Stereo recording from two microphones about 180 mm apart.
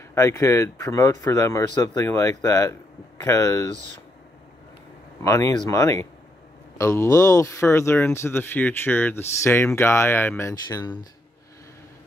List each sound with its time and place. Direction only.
0.1 s speech: 15° left (ahead or behind)
5.2 s speech: 15° left (ahead or behind)